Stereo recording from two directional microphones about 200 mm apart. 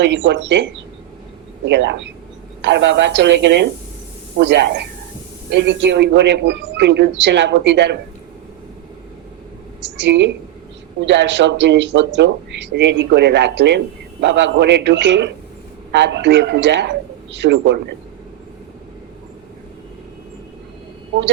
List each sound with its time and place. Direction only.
0.0 s speech: 60° right (ahead or behind)
9.8 s speech: 60° right (ahead or behind)